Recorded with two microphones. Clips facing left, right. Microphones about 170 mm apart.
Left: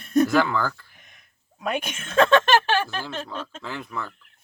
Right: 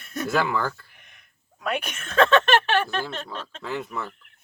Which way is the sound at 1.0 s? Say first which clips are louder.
Left 1 dB; 40° left (ahead or behind).